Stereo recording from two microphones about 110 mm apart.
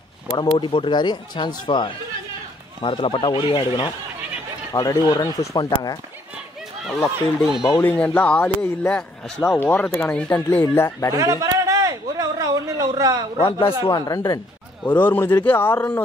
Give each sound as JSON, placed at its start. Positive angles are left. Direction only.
{"t": 0.4, "sound": "speech", "side_deg": 45}
{"t": 4.7, "sound": "speech", "side_deg": 30}
{"t": 6.9, "sound": "speech", "side_deg": 0}
{"t": 7.7, "sound": "speech", "side_deg": 15}
{"t": 11.1, "sound": "a sound", "side_deg": -30}
{"t": 13.4, "sound": "speech", "side_deg": 50}
{"t": 13.8, "sound": "speech", "side_deg": 35}
{"t": 14.9, "sound": "speech", "side_deg": 20}